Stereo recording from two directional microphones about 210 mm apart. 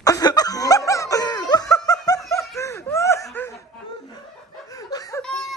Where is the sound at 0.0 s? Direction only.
20° left (ahead or behind).